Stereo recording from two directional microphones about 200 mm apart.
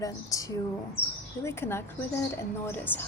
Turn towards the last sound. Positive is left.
turn(degrees=10)  # may be behind; listen again after turning